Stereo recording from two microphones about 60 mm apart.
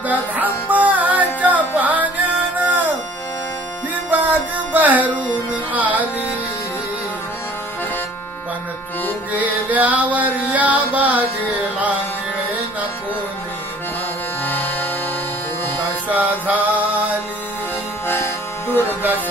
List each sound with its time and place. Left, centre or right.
0.1 s music: right
4.1 s music: right
5.7 s carnatic music: right
9.4 s music: right
14.4 s music: left
16.1 s music: right
18.7 s music: left